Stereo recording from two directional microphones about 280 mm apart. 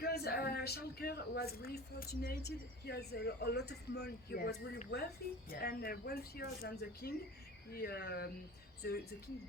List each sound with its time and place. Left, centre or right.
0.0 s speech: left